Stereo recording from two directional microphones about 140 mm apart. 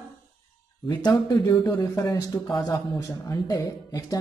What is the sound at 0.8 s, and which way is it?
Speech, 30° left (ahead or behind).